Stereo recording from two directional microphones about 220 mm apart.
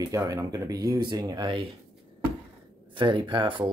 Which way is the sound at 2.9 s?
20° right (ahead or behind).